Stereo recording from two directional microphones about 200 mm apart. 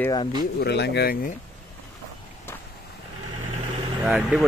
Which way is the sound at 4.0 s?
Centre (ahead or behind).